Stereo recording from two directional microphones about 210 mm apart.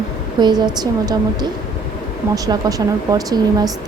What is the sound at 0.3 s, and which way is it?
A woman's voice, 20° right (ahead or behind).